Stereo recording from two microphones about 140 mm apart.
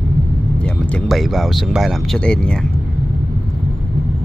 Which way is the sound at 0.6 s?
10° left (ahead or behind).